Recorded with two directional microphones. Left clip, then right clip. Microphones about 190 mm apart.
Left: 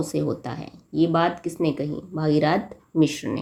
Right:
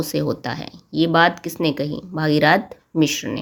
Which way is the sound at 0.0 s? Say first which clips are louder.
Right 3 dB; 30° right (ahead or behind).